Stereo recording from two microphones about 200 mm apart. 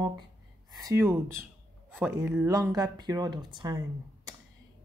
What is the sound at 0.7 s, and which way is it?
Speech, 20° right (ahead or behind).